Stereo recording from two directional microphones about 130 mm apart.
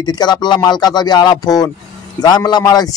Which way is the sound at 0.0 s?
35° left (ahead or behind).